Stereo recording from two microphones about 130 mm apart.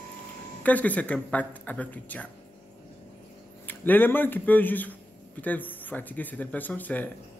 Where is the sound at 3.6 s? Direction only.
15° left (ahead or behind).